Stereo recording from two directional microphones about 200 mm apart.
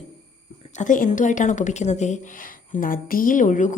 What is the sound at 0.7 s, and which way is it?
A woman's voice, 40° left (ahead or behind).